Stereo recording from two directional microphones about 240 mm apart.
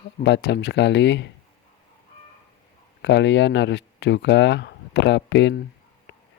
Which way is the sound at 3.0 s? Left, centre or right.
Left.